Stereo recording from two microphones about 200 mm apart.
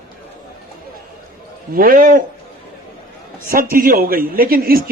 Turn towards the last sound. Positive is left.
turn(degrees=-45)  # may be behind; listen again after turning